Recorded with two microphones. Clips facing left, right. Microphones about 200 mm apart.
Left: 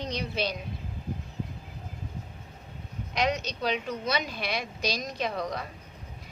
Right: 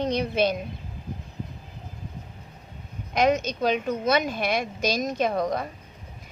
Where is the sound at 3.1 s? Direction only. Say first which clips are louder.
Right 7 dB; 50° right (ahead or behind).